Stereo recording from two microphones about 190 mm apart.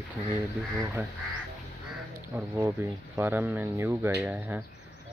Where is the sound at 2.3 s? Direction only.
15° right (ahead or behind).